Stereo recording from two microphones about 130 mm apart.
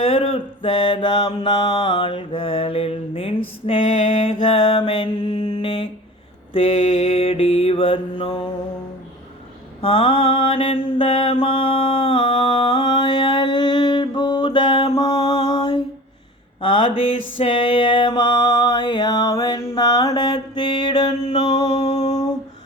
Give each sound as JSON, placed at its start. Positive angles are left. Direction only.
{"t": 0.0, "sound": "mantra", "side_deg": 45}
{"t": 6.5, "sound": "mantra", "side_deg": 50}
{"t": 9.8, "sound": "mantra", "side_deg": 50}
{"t": 14.9, "sound": "mantra", "side_deg": 30}
{"t": 16.6, "sound": "mantra", "side_deg": 45}
{"t": 21.8, "sound": "a sound", "side_deg": 60}